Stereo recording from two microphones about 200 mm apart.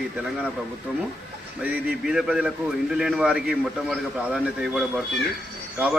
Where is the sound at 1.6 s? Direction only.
5° right (ahead or behind).